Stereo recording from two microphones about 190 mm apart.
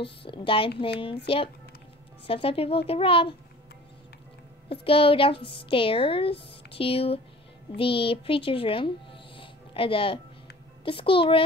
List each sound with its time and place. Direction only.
0.2 s speech: 25° left (ahead or behind)
4.8 s speech: 30° left (ahead or behind)